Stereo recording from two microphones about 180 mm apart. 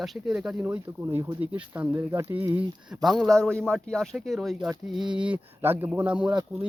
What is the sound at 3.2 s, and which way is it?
Speech, 5° left (ahead or behind).